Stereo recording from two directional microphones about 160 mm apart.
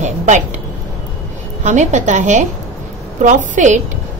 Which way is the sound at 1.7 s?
50° right (ahead or behind).